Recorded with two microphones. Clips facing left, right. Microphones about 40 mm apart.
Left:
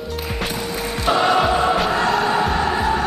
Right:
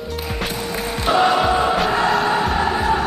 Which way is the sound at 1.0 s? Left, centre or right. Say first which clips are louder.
Right 1 dB; centre.